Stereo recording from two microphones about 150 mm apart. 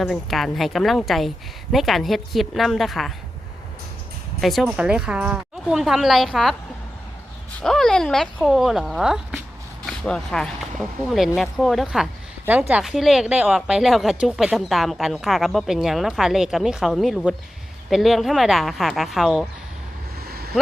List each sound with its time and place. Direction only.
0.0 s speech: centre (ahead or behind)
4.4 s speech: centre (ahead or behind)
7.6 s speech: 5° left (ahead or behind)
20.2 s waves: 90° right